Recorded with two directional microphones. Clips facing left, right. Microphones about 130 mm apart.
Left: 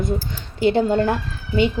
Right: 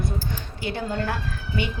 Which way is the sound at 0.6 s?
25° left (ahead or behind).